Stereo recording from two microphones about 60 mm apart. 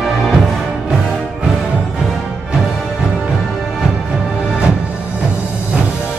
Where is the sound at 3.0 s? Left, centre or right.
Centre.